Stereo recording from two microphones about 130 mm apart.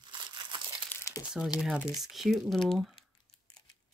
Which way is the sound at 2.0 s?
Centre (ahead or behind).